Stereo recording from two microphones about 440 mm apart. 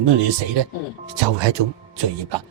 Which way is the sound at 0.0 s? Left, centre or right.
Right.